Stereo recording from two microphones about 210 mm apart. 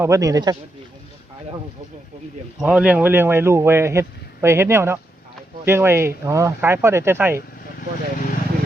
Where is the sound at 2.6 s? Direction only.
5° right (ahead or behind).